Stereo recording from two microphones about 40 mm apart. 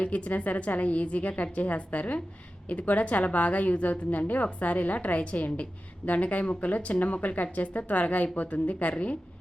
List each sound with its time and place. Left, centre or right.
0.0 s speech: left